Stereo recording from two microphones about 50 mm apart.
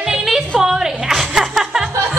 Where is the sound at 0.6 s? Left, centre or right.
Centre.